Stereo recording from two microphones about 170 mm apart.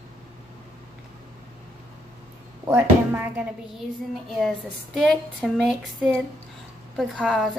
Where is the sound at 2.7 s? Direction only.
15° right (ahead or behind).